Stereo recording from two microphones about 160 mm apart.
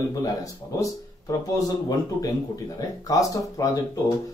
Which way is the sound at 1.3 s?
20° left (ahead or behind).